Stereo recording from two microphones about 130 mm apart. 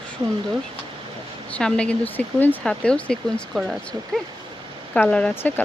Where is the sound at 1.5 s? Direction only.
5° left (ahead or behind).